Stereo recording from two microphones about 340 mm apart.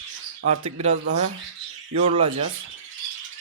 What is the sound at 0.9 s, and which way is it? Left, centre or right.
Speech, right.